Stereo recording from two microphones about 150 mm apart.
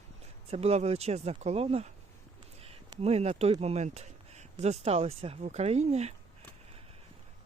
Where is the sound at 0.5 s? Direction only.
45° right (ahead or behind).